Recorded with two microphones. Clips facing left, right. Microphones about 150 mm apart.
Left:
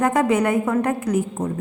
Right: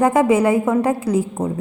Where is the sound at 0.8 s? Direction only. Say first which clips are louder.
Right 3 dB; 30° right (ahead or behind).